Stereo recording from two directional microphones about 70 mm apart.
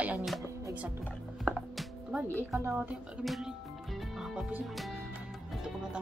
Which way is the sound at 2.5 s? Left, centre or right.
Right.